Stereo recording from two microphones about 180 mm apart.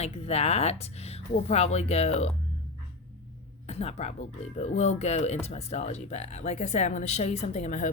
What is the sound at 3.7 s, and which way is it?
Speech, 35° left (ahead or behind).